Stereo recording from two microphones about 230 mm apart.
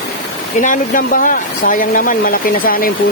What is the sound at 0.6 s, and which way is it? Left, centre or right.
Speech, left.